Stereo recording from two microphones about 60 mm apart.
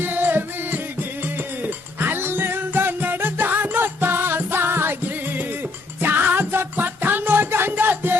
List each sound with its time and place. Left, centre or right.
0.0 s music: right